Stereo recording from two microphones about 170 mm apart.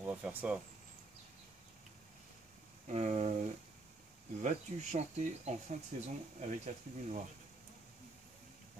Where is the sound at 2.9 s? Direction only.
40° right (ahead or behind).